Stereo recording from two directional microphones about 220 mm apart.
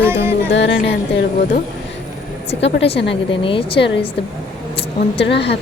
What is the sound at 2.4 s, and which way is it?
Speech, 25° left (ahead or behind).